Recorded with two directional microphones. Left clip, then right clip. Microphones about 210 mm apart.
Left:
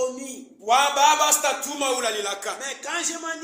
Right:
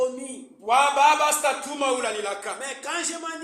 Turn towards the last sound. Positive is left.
turn(degrees=0)  # may be behind; listen again after turning